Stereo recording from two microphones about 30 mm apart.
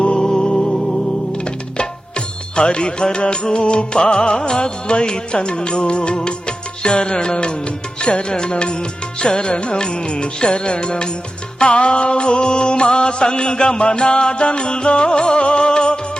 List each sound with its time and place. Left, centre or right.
0.0 s music: left